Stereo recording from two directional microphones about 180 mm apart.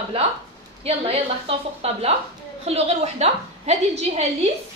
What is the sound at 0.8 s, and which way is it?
A woman's voice, 35° right (ahead or behind).